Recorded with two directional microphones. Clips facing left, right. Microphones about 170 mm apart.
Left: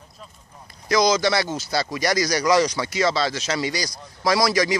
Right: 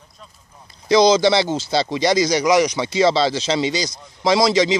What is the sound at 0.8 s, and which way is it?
Speech, 30° right (ahead or behind).